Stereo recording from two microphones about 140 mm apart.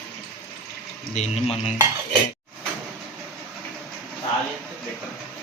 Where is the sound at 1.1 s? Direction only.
50° left (ahead or behind).